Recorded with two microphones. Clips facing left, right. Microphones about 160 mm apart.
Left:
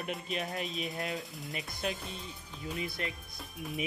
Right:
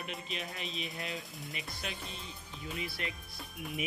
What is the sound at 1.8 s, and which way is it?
Speech, 45° left (ahead or behind).